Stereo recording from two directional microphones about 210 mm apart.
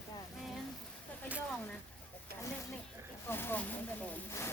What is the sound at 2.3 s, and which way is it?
Snake, 45° right (ahead or behind).